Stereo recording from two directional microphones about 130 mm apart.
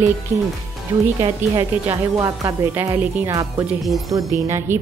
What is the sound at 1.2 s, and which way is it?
A woman's voice, 30° right (ahead or behind).